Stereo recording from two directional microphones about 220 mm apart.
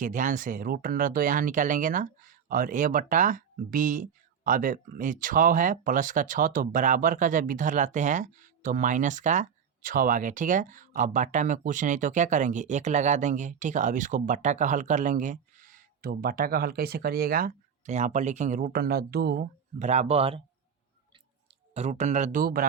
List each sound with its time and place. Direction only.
0.0 s speech: 35° right (ahead or behind)
19.8 s speech: 30° right (ahead or behind)
21.7 s speech: 30° right (ahead or behind)